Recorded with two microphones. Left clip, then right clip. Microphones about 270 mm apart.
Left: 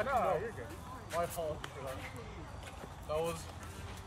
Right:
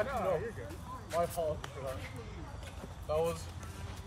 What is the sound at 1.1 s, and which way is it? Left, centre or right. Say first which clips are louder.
Speech: right 3 dB; centre.